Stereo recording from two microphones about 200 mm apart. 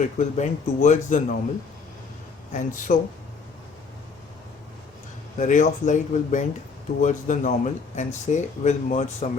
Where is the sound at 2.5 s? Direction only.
40° left (ahead or behind).